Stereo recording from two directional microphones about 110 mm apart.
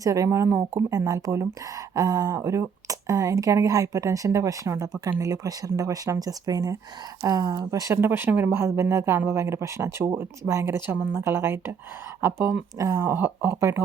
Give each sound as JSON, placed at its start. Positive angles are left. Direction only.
{"t": 0.0, "sound": "speech", "side_deg": -30}
{"t": 12.8, "sound": "speech", "side_deg": -30}
{"t": 13.1, "sound": "speech", "side_deg": -20}